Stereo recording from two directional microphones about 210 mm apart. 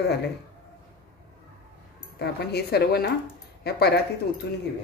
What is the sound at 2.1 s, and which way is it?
Speech, 50° left (ahead or behind).